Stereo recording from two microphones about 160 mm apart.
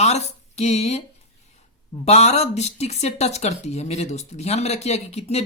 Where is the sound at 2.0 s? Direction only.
40° left (ahead or behind).